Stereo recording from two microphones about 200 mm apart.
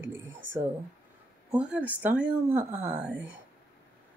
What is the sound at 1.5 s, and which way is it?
Speech, 5° right (ahead or behind).